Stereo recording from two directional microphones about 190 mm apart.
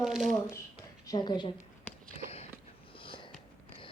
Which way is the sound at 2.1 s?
35° left (ahead or behind).